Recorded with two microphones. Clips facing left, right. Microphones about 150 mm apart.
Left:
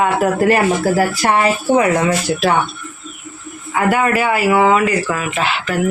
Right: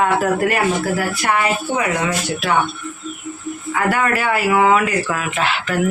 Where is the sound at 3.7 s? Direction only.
15° left (ahead or behind).